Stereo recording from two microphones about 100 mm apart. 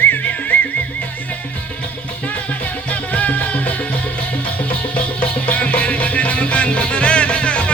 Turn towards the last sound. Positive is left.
turn(degrees=10)  # may be behind; listen again after turning